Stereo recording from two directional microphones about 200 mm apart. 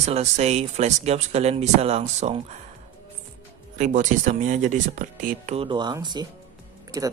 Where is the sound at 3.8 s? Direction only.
40° right (ahead or behind).